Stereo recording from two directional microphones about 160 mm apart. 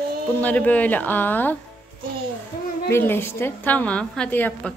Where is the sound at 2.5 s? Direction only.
70° left (ahead or behind).